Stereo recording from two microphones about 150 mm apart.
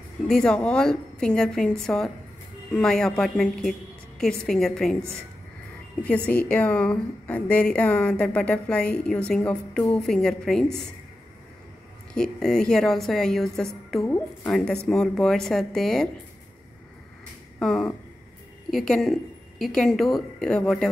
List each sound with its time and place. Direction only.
0.3 s a woman's voice: 5° left (ahead or behind)
6.0 s a woman's voice: 10° left (ahead or behind)
12.1 s a woman's voice: 5° left (ahead or behind)
14.0 s a woman's voice: 15° left (ahead or behind)
14.5 s a woman's voice: 5° left (ahead or behind)
17.6 s a sound: 5° left (ahead or behind)
18.7 s a woman's voice: centre (ahead or behind)